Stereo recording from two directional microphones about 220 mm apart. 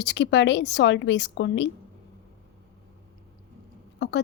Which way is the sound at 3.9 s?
50° left (ahead or behind).